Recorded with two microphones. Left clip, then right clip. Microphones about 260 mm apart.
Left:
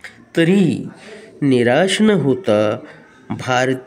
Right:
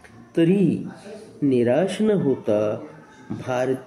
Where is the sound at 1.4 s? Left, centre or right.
Left.